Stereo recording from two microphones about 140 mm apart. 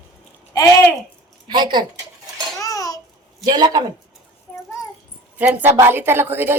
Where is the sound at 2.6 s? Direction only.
25° left (ahead or behind).